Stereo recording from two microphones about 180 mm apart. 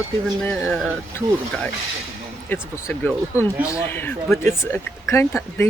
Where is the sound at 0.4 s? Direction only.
5° left (ahead or behind).